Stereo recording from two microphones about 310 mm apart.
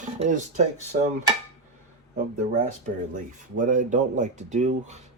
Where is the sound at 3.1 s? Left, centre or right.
Right.